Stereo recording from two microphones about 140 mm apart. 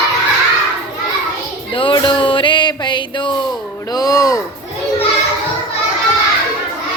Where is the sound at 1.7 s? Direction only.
40° left (ahead or behind).